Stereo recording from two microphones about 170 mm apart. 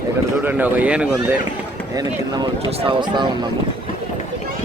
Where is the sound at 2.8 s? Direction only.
30° right (ahead or behind).